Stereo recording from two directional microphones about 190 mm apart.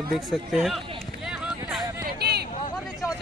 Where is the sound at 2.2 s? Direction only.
55° right (ahead or behind).